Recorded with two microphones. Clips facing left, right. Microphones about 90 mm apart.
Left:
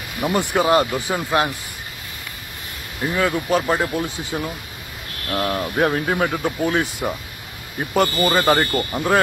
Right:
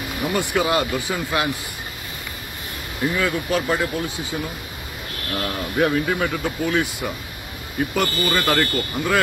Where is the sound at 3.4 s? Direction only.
30° left (ahead or behind).